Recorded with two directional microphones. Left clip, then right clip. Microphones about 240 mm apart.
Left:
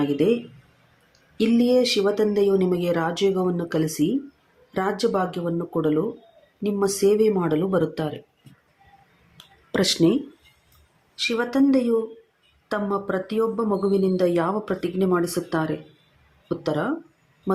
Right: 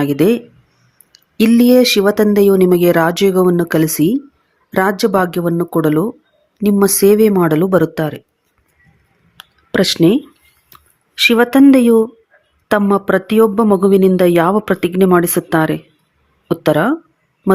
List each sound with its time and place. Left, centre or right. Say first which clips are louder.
0.0 s speech: right 8 dB; right
9.4 s a sound: right 8 dB; right
11.2 s speech: right 12 dB; right